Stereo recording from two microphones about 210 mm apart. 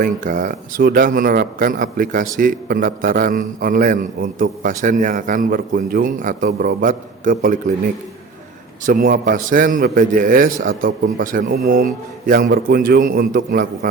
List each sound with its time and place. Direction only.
0.0 s a man's voice: 40° right (ahead or behind)
8.9 s a man's voice: 45° right (ahead or behind)